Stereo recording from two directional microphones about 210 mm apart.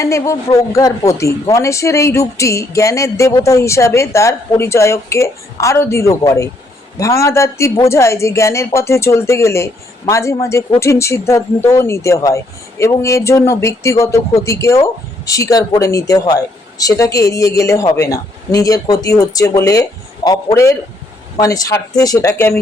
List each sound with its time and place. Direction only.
0.0 s a woman's voice: 15° left (ahead or behind)